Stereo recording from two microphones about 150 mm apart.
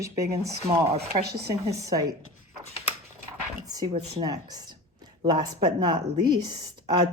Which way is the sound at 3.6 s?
25° right (ahead or behind).